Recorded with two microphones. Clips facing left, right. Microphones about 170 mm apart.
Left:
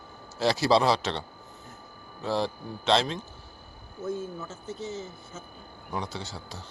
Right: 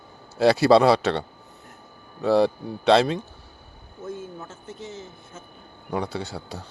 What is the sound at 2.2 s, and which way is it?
Speech, 65° right (ahead or behind).